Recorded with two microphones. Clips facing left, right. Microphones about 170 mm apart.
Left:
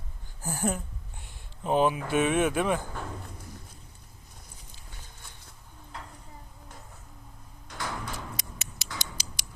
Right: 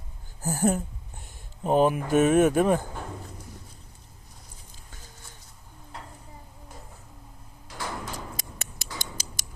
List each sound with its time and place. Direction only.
0.4 s a sound: 45° right (ahead or behind)
1.2 s speech: 40° right (ahead or behind)
7.7 s door: 5° right (ahead or behind)
8.4 s tick-tock: 50° right (ahead or behind)